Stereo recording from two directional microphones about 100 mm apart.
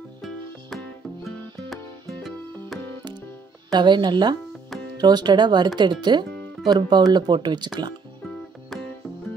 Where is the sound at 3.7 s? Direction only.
50° right (ahead or behind).